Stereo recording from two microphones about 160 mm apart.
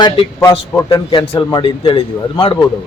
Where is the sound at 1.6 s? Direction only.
30° left (ahead or behind).